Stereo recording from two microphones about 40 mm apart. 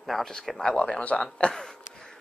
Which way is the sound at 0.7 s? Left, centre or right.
Left.